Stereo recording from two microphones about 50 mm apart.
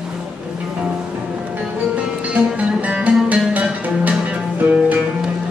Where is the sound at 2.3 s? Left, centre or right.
Right.